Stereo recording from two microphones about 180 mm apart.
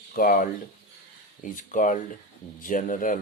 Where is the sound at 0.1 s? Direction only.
50° left (ahead or behind).